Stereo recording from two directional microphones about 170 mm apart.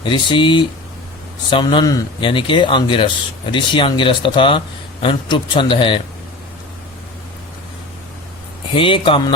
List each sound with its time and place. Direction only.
0.0 s speech: 30° left (ahead or behind)
8.7 s a man's voice: 30° left (ahead or behind)